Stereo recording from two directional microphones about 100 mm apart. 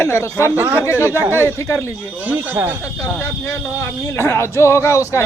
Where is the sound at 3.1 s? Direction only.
25° left (ahead or behind).